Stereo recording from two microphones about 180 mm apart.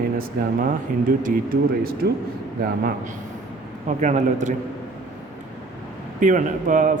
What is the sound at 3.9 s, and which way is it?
Speech, 40° right (ahead or behind).